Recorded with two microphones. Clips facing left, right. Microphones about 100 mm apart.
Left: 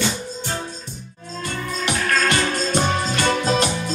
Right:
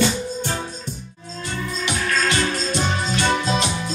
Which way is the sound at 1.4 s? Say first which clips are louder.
Left 1 dB; 50° left (ahead or behind).